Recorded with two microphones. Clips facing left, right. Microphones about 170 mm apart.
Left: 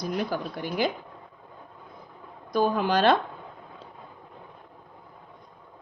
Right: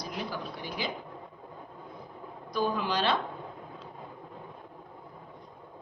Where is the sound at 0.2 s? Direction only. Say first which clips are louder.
Left 7 dB; 55° left (ahead or behind).